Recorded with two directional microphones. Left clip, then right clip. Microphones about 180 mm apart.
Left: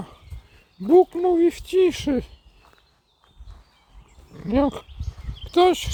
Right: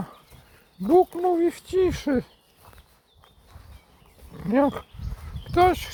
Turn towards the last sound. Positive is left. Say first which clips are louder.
# left 2 dB
turn(degrees=15)  # may be behind; listen again after turning